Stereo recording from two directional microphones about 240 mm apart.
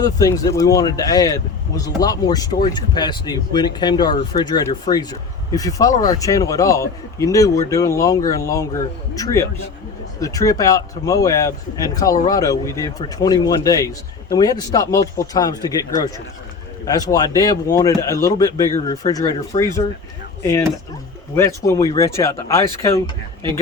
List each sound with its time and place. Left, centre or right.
0.0 s speech: centre